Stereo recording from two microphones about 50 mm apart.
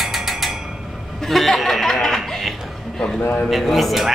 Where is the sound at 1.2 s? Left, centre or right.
Centre.